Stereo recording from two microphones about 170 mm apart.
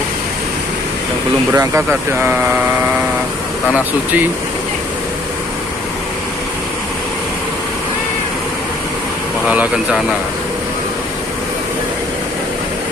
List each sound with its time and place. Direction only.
1.5 s speech: 15° right (ahead or behind)
9.5 s speech: 5° right (ahead or behind)